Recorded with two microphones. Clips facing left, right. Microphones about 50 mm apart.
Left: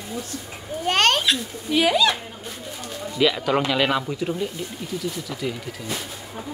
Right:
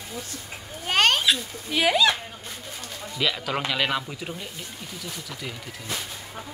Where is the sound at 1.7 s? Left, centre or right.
Centre.